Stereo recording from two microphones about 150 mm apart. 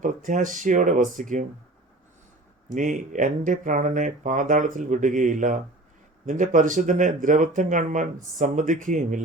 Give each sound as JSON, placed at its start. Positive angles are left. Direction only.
{"t": 0.0, "sound": "speech", "side_deg": -60}
{"t": 2.6, "sound": "speech", "side_deg": -60}